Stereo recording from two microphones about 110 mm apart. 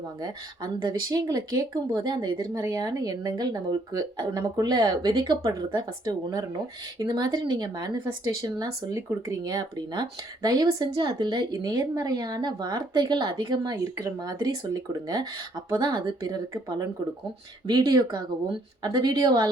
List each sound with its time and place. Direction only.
0.2 s speech: 40° right (ahead or behind)